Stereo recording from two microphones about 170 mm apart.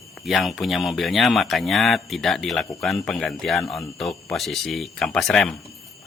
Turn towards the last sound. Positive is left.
turn(degrees=0)  # may be behind; listen again after turning